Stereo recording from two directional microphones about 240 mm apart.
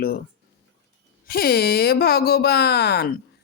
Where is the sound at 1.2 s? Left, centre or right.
Left.